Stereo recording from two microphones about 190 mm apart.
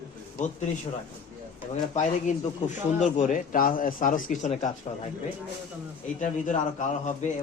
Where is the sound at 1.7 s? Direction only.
40° left (ahead or behind).